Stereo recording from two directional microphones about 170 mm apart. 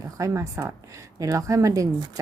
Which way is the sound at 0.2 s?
15° right (ahead or behind).